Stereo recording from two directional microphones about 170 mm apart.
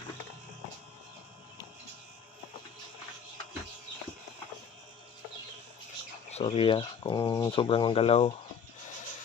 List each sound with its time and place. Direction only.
6.3 s speech: 35° left (ahead or behind)